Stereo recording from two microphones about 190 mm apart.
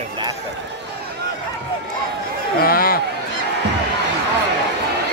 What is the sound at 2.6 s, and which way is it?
Speech, 50° left (ahead or behind).